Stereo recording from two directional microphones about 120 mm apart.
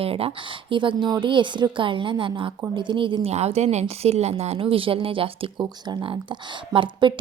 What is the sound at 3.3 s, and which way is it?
Speech, 65° right (ahead or behind).